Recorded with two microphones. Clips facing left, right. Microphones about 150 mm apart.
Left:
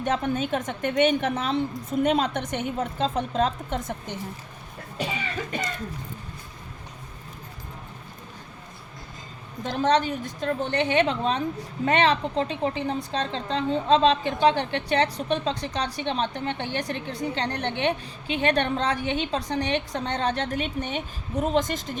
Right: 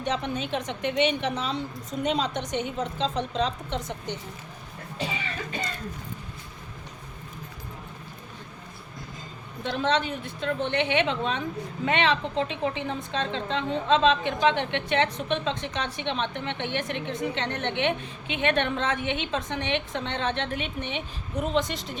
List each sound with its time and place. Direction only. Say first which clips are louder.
0.0 s a woman's voice: left 4 dB; 50° left (ahead or behind)
9.6 s a woman's voice: left 3 dB; 40° left (ahead or behind)